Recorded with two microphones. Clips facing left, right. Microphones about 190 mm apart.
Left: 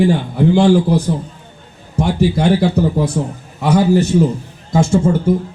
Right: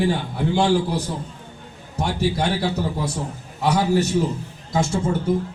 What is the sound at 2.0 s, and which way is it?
A man's voice, 55° left (ahead or behind).